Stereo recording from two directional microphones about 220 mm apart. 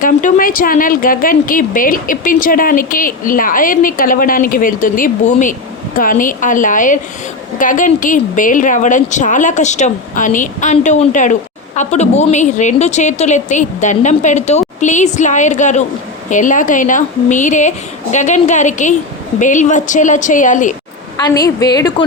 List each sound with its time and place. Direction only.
0.0 s speech: 35° left (ahead or behind)
21.2 s a woman's voice: 15° left (ahead or behind)